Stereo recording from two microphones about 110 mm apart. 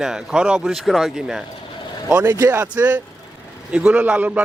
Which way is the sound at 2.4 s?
20° right (ahead or behind).